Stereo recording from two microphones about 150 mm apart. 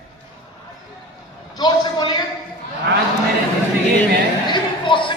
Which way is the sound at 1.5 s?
30° left (ahead or behind).